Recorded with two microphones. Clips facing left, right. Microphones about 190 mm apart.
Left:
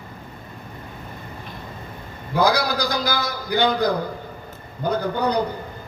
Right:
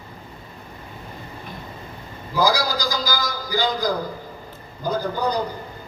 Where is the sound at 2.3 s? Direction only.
65° left (ahead or behind).